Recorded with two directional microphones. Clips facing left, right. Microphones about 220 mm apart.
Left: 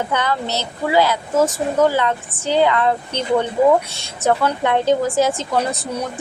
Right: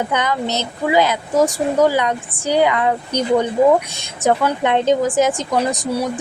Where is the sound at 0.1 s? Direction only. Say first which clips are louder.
Right 1 dB; 15° right (ahead or behind).